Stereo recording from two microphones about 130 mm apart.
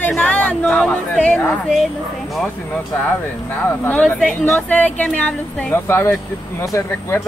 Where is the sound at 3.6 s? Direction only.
15° left (ahead or behind).